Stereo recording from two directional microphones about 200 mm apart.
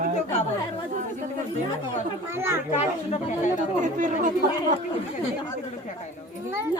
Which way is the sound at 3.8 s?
40° right (ahead or behind).